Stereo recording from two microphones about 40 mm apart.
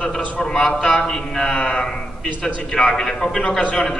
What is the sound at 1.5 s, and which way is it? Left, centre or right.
Speech, left.